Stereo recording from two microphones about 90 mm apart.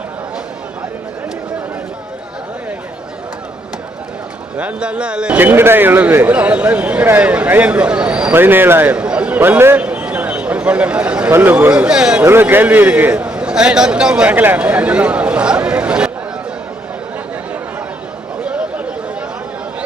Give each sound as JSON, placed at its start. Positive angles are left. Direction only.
{"t": 4.5, "sound": "speech", "side_deg": -15}
{"t": 5.4, "sound": "speech", "side_deg": -25}
{"t": 9.7, "sound": "a sound", "side_deg": -15}
{"t": 11.3, "sound": "a man's voice", "side_deg": -25}
{"t": 11.7, "sound": "speech", "side_deg": -10}
{"t": 12.2, "sound": "a man's voice", "side_deg": -25}